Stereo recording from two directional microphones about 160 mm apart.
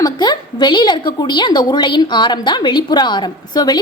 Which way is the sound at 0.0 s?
25° left (ahead or behind).